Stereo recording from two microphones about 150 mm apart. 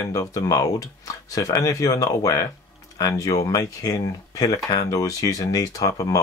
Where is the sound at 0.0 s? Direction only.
20° left (ahead or behind).